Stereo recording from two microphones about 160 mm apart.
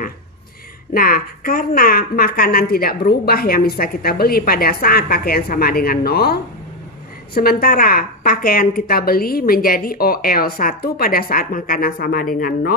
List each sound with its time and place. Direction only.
0.9 s a woman's voice: 65° left (ahead or behind)